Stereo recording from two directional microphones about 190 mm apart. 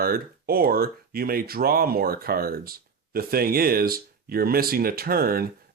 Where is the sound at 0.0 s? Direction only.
50° right (ahead or behind).